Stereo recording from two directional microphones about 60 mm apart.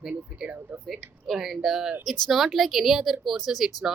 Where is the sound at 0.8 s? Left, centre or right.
Centre.